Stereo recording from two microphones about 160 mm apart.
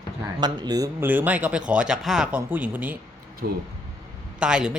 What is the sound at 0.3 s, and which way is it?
Speech, 25° right (ahead or behind).